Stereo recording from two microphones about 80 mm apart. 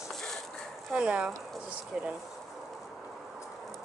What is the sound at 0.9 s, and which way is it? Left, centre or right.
Speech, centre.